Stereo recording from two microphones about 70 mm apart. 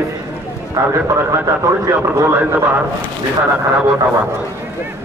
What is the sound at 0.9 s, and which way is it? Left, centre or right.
A man's voice, right.